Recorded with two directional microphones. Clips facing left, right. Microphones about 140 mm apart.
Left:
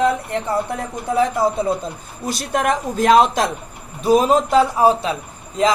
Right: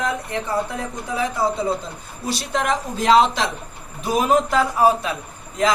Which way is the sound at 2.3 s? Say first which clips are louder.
Left 3 dB; 50° left (ahead or behind).